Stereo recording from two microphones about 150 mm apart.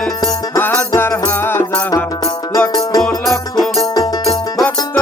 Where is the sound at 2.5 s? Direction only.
25° left (ahead or behind).